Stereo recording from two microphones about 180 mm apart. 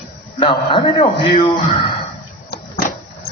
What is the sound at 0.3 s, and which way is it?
A man's voice, 30° left (ahead or behind).